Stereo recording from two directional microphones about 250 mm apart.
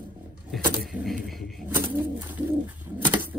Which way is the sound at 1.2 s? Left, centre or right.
Centre.